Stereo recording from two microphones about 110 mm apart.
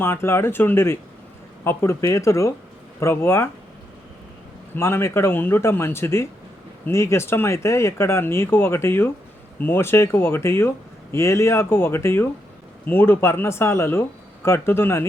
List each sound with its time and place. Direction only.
0.0 s speech: 20° left (ahead or behind)
4.7 s speech: 20° left (ahead or behind)